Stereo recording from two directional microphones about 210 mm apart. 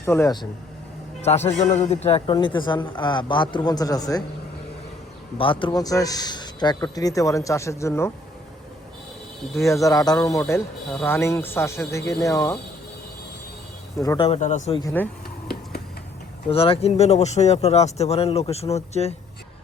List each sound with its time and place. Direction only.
0.0 s a man's voice: 10° left (ahead or behind)
1.2 s a man's voice: 30° left (ahead or behind)
5.4 s a man's voice: 25° left (ahead or behind)
9.6 s a man's voice: 15° left (ahead or behind)
14.0 s a man's voice: 15° left (ahead or behind)
14.3 s speech: 35° left (ahead or behind)
14.8 s a man's voice: 10° left (ahead or behind)
16.5 s a man's voice: 25° left (ahead or behind)